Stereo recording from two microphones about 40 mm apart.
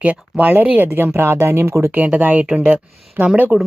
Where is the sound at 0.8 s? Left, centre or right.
Right.